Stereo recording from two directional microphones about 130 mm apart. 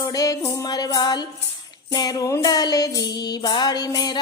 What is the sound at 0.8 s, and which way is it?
Music, 35° left (ahead or behind).